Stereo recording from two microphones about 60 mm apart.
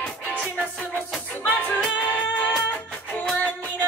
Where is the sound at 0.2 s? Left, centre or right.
Left.